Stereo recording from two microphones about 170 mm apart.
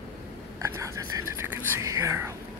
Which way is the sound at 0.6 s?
20° right (ahead or behind).